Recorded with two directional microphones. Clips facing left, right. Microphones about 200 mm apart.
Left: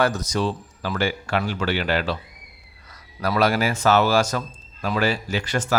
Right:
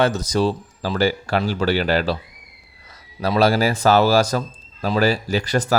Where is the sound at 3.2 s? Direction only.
30° right (ahead or behind).